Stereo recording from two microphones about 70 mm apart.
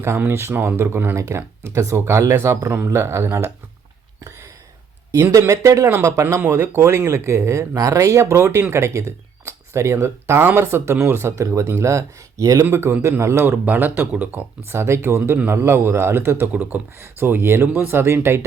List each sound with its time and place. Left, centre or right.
0.3 s speech: right
5.5 s speech: right
5.9 s speech: right
13.7 s speech: right
14.6 s speech: right